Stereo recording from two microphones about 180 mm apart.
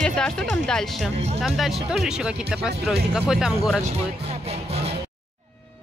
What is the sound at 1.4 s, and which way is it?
Speech, centre (ahead or behind).